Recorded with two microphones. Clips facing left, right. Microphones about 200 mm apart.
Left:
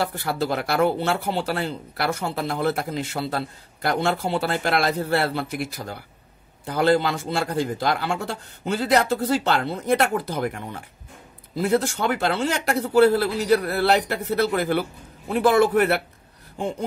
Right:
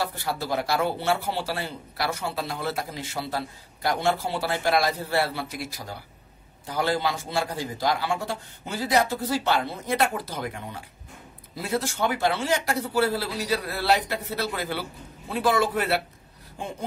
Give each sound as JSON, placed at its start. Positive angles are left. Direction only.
{"t": 0.0, "sound": "speech", "side_deg": 60}